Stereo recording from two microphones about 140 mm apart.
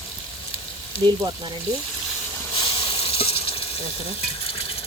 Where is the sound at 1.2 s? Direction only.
30° right (ahead or behind).